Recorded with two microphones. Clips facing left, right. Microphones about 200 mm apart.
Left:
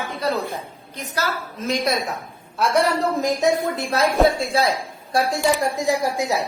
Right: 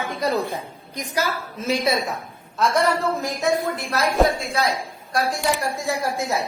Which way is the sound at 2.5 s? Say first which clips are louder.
Left 1 dB; 10° left (ahead or behind).